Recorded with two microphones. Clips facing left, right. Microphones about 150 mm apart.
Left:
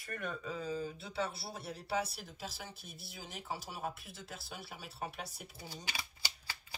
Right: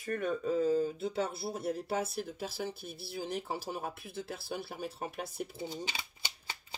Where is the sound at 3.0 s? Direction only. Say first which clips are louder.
Right 12 dB; 30° right (ahead or behind).